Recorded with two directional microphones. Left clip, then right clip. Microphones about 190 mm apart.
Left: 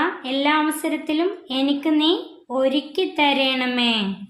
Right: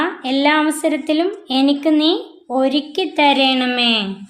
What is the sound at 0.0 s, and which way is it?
A woman's voice, 45° right (ahead or behind).